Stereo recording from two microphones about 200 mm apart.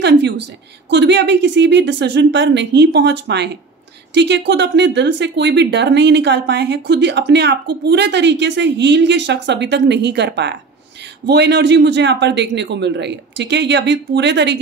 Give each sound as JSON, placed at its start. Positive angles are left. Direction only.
{"t": 0.8, "sound": "speech", "side_deg": -60}